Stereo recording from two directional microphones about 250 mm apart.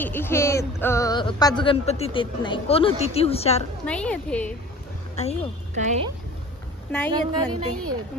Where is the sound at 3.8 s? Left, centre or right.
Centre.